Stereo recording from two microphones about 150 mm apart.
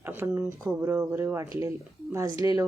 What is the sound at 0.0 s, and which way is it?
Speech, 15° right (ahead or behind).